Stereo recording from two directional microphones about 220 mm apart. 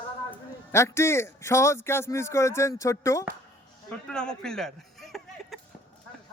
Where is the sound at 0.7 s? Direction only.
10° left (ahead or behind).